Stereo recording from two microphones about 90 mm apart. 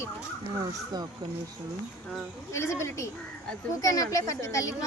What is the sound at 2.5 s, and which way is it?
A child's voice, 30° left (ahead or behind).